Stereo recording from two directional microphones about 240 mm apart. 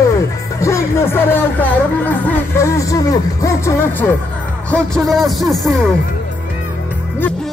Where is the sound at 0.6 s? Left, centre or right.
Centre.